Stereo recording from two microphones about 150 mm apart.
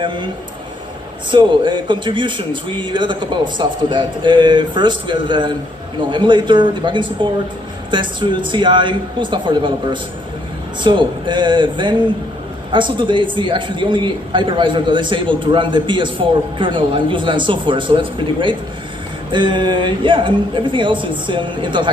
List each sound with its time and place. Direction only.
1.3 s speech: 30° right (ahead or behind)